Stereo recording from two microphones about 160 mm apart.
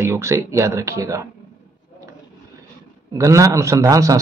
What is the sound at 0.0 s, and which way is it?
Speech, 15° right (ahead or behind).